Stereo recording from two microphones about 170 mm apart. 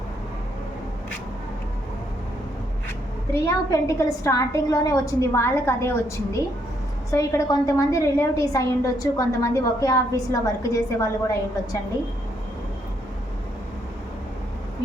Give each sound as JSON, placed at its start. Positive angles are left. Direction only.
{"t": 3.3, "sound": "a woman's voice", "side_deg": 20}